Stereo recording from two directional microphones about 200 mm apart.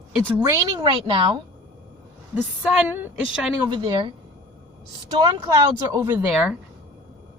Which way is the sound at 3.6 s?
20° right (ahead or behind).